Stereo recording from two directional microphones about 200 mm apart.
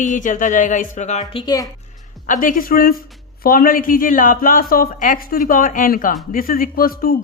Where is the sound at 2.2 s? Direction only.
45° left (ahead or behind).